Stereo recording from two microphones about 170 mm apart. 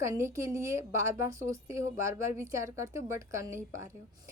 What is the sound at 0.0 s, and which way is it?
A woman's voice, 15° right (ahead or behind).